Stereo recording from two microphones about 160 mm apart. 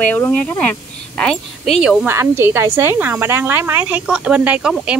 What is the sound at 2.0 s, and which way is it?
Speech, 15° right (ahead or behind).